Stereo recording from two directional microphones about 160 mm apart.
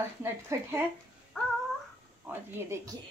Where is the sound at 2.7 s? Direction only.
15° right (ahead or behind).